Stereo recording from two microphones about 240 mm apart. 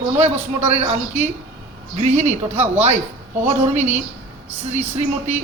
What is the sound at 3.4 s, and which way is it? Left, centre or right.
Speech, right.